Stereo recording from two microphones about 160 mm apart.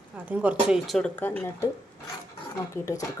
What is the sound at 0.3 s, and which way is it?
Speech, 10° right (ahead or behind).